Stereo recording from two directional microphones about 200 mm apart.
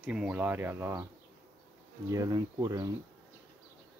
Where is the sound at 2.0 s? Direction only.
15° right (ahead or behind).